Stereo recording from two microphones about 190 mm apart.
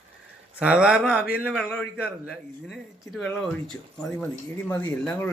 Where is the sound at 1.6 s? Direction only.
5° left (ahead or behind).